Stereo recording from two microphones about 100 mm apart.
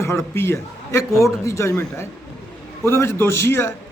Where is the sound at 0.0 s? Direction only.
30° left (ahead or behind).